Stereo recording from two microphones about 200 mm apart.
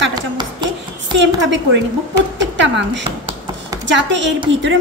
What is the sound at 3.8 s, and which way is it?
Speech, 65° right (ahead or behind).